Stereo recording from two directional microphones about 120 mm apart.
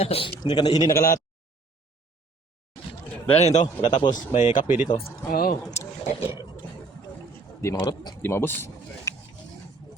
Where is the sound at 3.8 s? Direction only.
40° left (ahead or behind).